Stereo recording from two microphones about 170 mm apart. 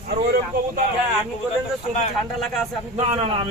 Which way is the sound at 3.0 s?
40° right (ahead or behind).